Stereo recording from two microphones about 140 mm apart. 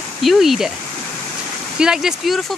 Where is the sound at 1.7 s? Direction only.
5° right (ahead or behind).